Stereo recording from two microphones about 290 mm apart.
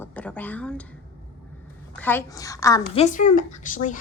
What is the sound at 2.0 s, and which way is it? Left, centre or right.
A woman's voice, centre.